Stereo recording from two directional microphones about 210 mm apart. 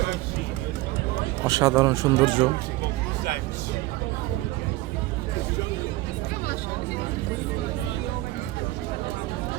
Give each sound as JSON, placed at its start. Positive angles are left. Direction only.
{"t": 1.5, "sound": "speech", "side_deg": -15}